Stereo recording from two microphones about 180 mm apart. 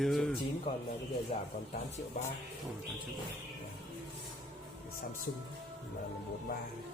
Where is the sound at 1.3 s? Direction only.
35° left (ahead or behind).